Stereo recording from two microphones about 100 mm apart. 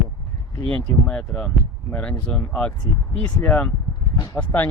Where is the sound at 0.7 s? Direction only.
5° left (ahead or behind).